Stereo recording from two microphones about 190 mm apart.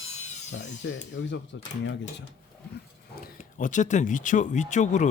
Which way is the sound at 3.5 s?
40° left (ahead or behind).